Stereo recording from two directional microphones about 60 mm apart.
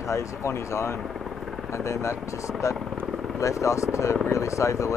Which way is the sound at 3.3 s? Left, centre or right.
Left.